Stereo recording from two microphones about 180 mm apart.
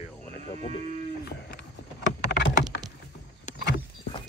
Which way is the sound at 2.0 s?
75° left (ahead or behind).